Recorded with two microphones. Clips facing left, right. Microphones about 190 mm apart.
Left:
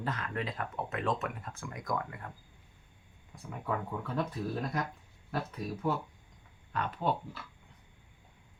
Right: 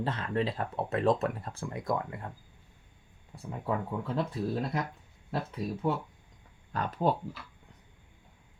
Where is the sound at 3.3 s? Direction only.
30° right (ahead or behind).